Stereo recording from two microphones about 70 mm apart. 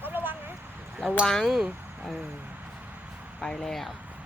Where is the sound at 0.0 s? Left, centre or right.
Right.